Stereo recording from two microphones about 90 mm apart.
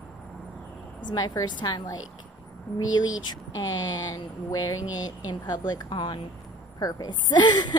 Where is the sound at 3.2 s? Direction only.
50° left (ahead or behind).